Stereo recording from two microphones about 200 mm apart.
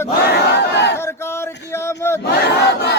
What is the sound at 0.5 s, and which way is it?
Battle cry, 60° left (ahead or behind).